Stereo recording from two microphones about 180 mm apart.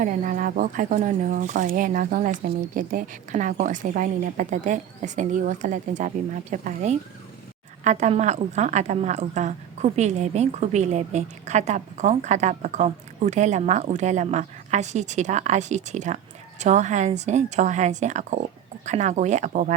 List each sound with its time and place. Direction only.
0.0 s a woman's voice: 45° right (ahead or behind)